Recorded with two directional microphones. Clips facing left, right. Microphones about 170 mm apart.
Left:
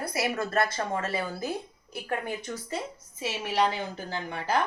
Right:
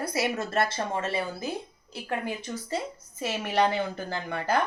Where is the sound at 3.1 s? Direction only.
55° right (ahead or behind).